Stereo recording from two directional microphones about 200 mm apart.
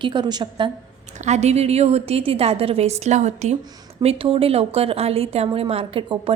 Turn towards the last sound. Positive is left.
turn(degrees=-25)  # may be behind; listen again after turning